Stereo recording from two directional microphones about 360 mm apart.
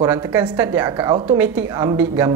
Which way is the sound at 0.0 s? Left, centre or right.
Centre.